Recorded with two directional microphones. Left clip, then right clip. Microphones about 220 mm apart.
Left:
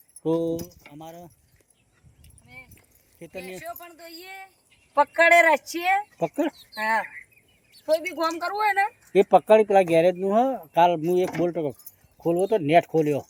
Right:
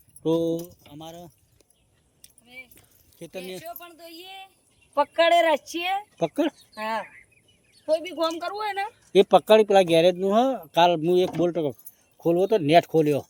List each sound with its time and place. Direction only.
0.2 s speech: 5° right (ahead or behind)
2.2 s keys jangling: 35° right (ahead or behind)
3.2 s speech: 10° right (ahead or behind)